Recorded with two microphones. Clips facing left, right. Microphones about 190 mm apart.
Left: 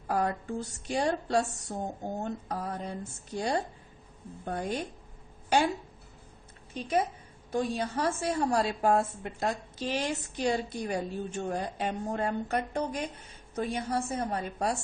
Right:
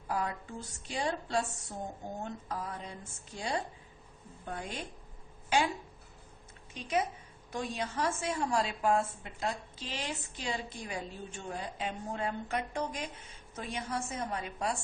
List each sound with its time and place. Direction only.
0.1 s a woman's voice: 50° left (ahead or behind)
7.5 s a woman's voice: 35° left (ahead or behind)